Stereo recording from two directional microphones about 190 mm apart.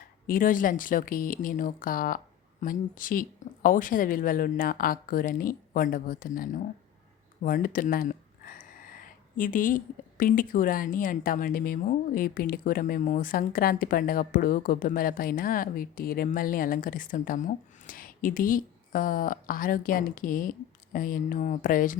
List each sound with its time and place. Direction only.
0.3 s speech: 45° left (ahead or behind)